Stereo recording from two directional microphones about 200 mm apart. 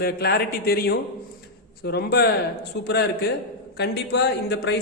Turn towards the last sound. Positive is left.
turn(degrees=55)  # may be behind; listen again after turning